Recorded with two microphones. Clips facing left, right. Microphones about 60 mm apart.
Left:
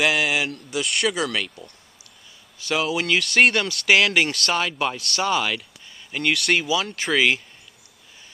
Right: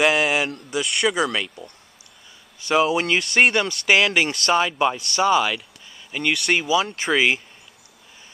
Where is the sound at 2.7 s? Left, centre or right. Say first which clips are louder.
Right 4 dB; right.